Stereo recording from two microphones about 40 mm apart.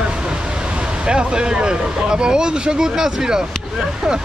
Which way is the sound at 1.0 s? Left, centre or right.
Right.